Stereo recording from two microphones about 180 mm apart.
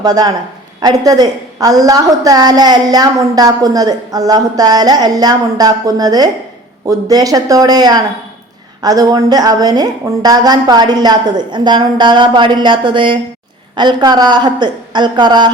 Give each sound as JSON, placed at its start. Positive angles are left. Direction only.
{"t": 0.0, "sound": "a woman's voice", "side_deg": -20}